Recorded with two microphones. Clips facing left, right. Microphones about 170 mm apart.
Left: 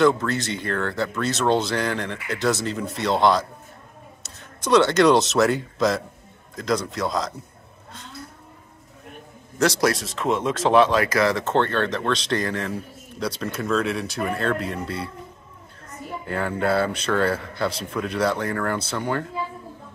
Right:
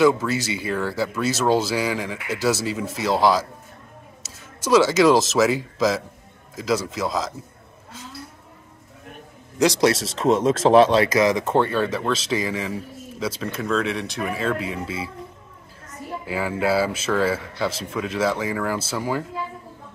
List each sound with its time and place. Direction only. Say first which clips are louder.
0.0 s speech: right 1 dB; 5° right (ahead or behind)
9.6 s a man's voice: right 2 dB; 20° right (ahead or behind)
10.1 s speech: right 5 dB; 40° right (ahead or behind)
11.1 s speech: right 2 dB; 15° right (ahead or behind)
16.3 s speech: right 1 dB; 5° right (ahead or behind)